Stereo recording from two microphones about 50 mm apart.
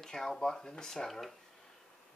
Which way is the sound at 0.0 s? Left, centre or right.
Centre.